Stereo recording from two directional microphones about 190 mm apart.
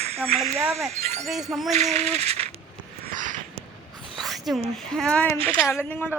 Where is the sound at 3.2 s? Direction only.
45° right (ahead or behind).